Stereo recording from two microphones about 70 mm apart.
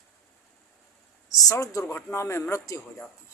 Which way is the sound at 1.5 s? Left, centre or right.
Left.